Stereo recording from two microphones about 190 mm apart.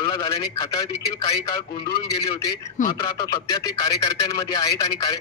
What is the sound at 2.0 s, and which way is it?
A man's voice, 20° left (ahead or behind).